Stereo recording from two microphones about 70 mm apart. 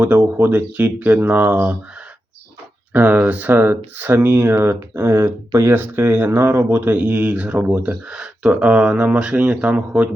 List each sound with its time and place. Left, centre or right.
0.0 s speech: right
2.9 s speech: right